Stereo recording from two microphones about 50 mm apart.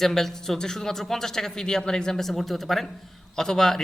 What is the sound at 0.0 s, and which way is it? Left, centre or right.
A man's voice, centre.